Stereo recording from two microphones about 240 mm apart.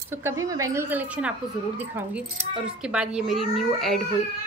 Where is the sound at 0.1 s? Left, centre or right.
Centre.